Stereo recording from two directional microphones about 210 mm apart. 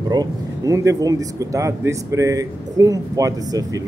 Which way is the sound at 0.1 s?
15° right (ahead or behind).